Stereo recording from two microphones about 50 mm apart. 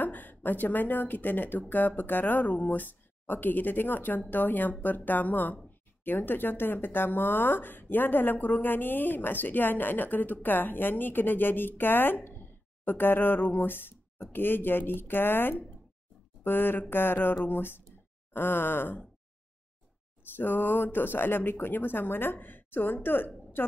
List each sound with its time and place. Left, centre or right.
0.0 s a woman's voice: left
12.3 s a sound: left
14.3 s speech: left
20.3 s speech: left